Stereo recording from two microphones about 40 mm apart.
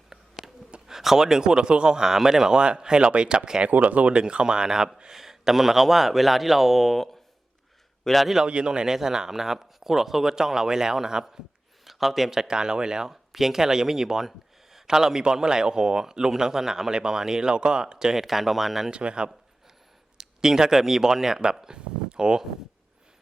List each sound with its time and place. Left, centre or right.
0.1 s a sound: centre
0.9 s speech: centre
3.7 s speech: right
4.1 s a man's voice: right; by 8.3 s centre
8.4 s speech: right
18.1 s a man's voice: centre
18.9 s speech: right
20.1 s speech: centre